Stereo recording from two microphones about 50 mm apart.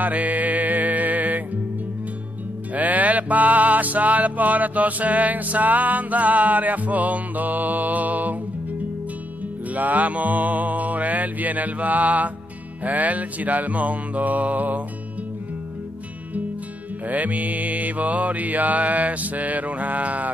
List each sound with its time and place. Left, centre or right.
0.0 s music: right
2.7 s music: right
9.8 s mantra: right
17.1 s mantra: right